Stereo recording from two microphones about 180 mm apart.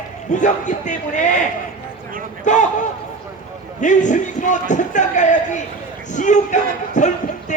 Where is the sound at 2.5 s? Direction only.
45° left (ahead or behind).